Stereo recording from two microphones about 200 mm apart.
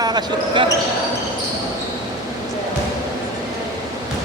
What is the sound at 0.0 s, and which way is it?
Speech, 20° right (ahead or behind).